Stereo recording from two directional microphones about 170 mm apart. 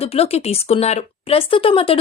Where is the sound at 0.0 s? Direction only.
35° left (ahead or behind).